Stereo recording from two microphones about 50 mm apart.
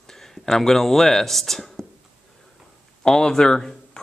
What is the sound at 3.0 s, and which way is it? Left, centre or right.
Speech, centre.